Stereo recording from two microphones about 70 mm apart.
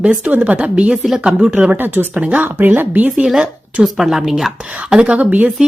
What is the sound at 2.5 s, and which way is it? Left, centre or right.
Speech, right.